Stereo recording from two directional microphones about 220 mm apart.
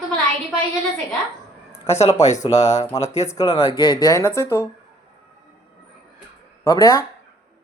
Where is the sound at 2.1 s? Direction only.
30° left (ahead or behind).